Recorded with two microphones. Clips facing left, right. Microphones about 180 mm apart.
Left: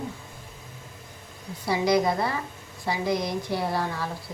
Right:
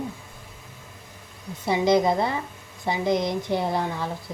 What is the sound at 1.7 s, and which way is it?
A woman's voice, 25° right (ahead or behind).